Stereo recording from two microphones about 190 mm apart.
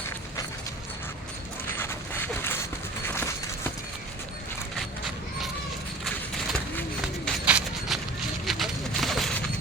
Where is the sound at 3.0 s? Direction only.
15° left (ahead or behind).